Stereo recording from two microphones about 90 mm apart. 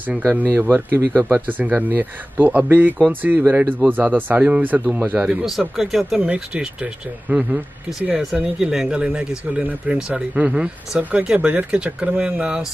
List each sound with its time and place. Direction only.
0.2 s speech: 20° right (ahead or behind)
8.2 s speech: 5° right (ahead or behind)